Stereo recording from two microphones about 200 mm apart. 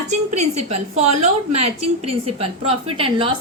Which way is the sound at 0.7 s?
35° right (ahead or behind).